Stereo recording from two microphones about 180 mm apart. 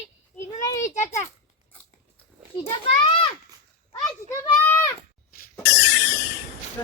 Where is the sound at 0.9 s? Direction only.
40° left (ahead or behind).